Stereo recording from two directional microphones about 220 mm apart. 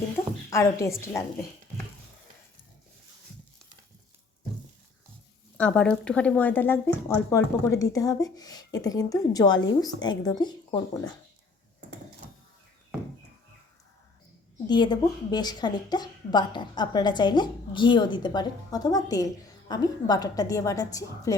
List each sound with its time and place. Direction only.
0.5 s speech: 15° left (ahead or behind)
5.5 s a woman's voice: 5° left (ahead or behind)
14.7 s a woman's voice: 20° left (ahead or behind)